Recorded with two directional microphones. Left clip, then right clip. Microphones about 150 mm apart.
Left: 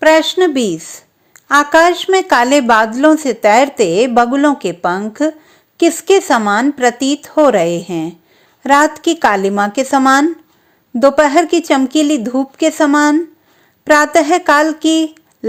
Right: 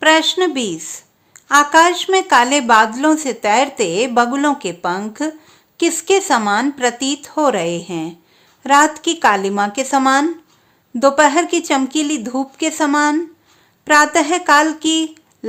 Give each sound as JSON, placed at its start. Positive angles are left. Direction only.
{"t": 0.0, "sound": "a woman's voice", "side_deg": 25}